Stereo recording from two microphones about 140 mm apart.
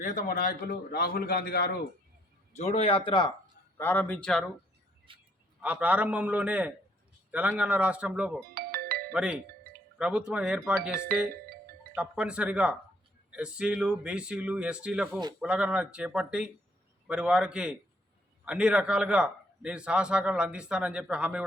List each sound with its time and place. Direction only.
0.0 s a man's voice: 70° left (ahead or behind); by 1.7 s 90° left
2.5 s speech: 50° left (ahead or behind); by 3.3 s 35° left (ahead or behind)
3.8 s speech: 15° left (ahead or behind)
5.1 s a sound: 40° right (ahead or behind)
5.6 s a man's voice: 10° right (ahead or behind)
8.5 s music: 90° right
9.1 s a man's voice: 5° right (ahead or behind)
11.9 s a man's voice: 10° right (ahead or behind)